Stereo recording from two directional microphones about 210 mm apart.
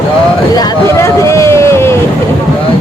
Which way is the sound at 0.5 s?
15° left (ahead or behind).